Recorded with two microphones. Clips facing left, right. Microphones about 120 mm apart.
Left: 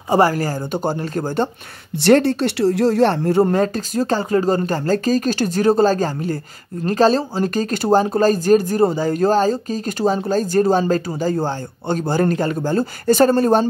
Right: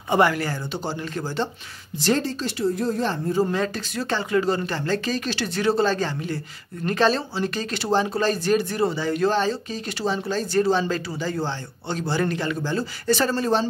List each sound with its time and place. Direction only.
0.1 s speech: 40° left (ahead or behind)
2.0 s speech: 65° left (ahead or behind)
3.5 s speech: 40° left (ahead or behind)